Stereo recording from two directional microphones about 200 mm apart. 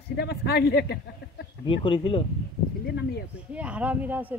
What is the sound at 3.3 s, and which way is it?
Speech, 5° right (ahead or behind).